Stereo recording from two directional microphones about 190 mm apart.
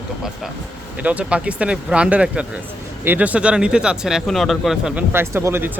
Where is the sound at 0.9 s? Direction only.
5° right (ahead or behind).